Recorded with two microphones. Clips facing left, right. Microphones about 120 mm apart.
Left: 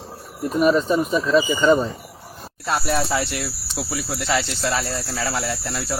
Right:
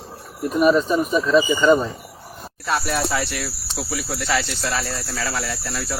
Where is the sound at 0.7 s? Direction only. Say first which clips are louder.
Even; 35° left (ahead or behind).